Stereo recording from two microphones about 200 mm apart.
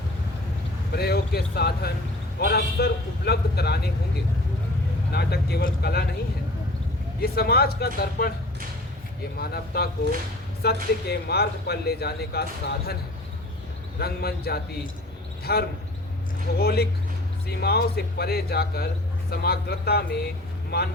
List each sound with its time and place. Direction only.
0.9 s speech: 55° left (ahead or behind)
5.1 s speech: 55° left (ahead or behind)
7.2 s speech: 50° left (ahead or behind)
9.4 s speech: 50° left (ahead or behind)
14.0 s speech: 50° left (ahead or behind)